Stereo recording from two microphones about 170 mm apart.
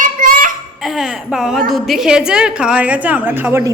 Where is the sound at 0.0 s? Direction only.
55° right (ahead or behind).